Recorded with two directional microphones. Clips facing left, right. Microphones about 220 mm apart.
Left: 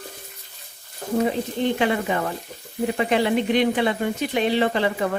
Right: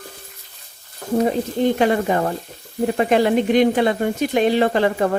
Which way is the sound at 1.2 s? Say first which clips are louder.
Right 4 dB; 40° right (ahead or behind).